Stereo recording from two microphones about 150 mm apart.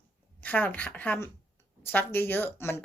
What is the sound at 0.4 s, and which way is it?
Speech, 10° left (ahead or behind).